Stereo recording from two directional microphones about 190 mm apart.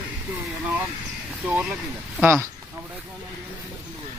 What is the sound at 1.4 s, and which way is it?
Speech, 5° right (ahead or behind).